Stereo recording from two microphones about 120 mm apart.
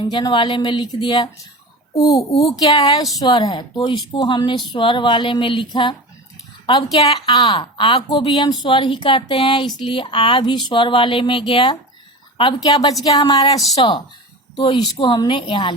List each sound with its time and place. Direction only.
0.0 s speech: 40° left (ahead or behind)
2.0 s a child's voice: 30° left (ahead or behind)
2.6 s a woman's voice: 40° left (ahead or behind)
7.0 s a woman's voice: 35° left (ahead or behind)
13.8 s a woman's voice: 45° left (ahead or behind)